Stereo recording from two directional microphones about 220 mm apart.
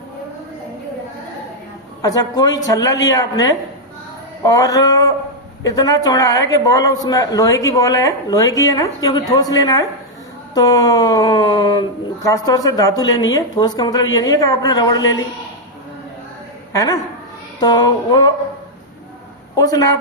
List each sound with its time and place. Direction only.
2.0 s speech: 15° left (ahead or behind)
16.7 s speech: 15° left (ahead or behind)
17.6 s child singing: 20° left (ahead or behind)
19.5 s speech: 15° left (ahead or behind)